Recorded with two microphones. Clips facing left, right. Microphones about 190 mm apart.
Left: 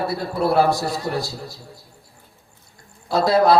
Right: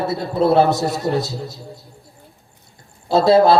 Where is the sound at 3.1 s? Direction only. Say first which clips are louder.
Right 3 dB; 25° right (ahead or behind).